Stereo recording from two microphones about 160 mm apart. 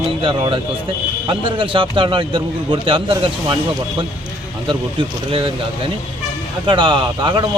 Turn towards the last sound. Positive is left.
turn(degrees=-30)  # may be behind; listen again after turning